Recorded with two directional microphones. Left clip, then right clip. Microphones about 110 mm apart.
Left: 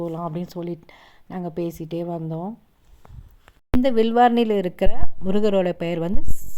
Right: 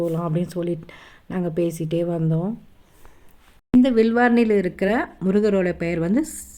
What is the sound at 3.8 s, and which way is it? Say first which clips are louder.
Speech: left 4 dB; 45° left (ahead or behind).